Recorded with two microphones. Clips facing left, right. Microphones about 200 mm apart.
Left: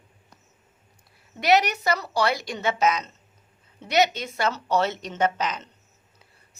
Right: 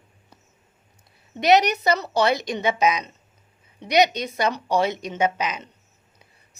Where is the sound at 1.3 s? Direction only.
20° right (ahead or behind).